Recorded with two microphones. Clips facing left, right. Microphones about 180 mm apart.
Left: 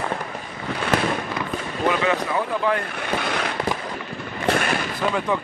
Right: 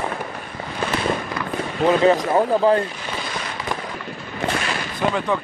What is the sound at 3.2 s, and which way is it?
Fireworks, 65° left (ahead or behind).